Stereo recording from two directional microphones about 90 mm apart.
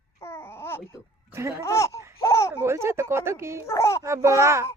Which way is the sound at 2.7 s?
30° right (ahead or behind).